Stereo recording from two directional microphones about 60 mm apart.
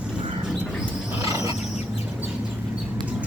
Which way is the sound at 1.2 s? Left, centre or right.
Right.